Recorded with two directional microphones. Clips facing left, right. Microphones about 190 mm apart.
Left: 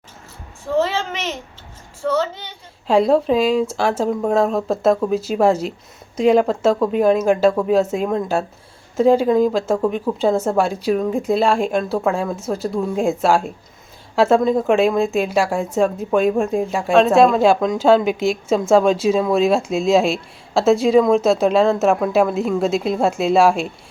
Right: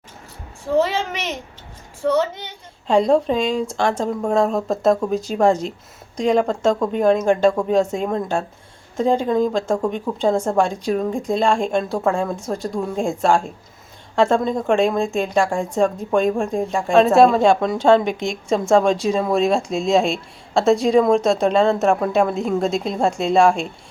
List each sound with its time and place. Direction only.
0.8 s a sound: 15° right (ahead or behind)
2.0 s speech: 15° right (ahead or behind)
2.8 s speech: 5° left (ahead or behind)